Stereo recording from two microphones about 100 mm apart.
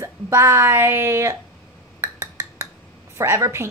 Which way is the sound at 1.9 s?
25° right (ahead or behind).